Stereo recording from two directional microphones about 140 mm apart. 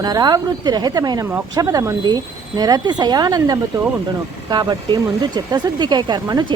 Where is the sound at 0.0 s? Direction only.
30° right (ahead or behind).